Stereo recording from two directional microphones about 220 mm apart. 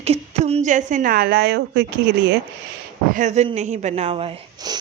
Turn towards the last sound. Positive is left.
turn(degrees=-20)  # may be behind; listen again after turning